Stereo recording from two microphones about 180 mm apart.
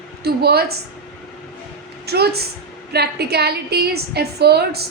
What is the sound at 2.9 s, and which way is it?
A woman's voice, 65° right (ahead or behind).